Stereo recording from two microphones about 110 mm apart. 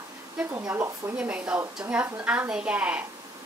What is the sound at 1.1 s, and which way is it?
A woman's voice, 10° right (ahead or behind).